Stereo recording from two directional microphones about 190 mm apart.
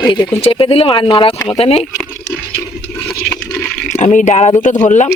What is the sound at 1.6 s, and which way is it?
Speech, 35° left (ahead or behind).